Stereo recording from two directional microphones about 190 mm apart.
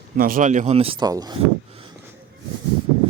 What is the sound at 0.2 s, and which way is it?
Speech, 45° right (ahead or behind).